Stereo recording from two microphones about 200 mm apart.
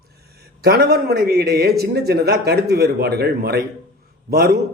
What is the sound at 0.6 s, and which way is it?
Speech, 50° right (ahead or behind).